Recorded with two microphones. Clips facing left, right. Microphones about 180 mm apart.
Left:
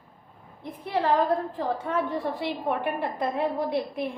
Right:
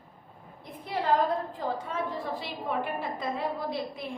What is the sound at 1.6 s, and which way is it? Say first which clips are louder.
A woman's voice: left 5 dB; 60° left (ahead or behind).